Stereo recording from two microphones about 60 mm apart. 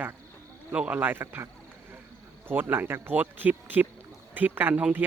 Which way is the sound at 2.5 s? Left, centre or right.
Right.